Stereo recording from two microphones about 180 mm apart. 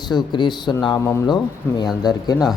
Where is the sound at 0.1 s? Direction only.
25° left (ahead or behind).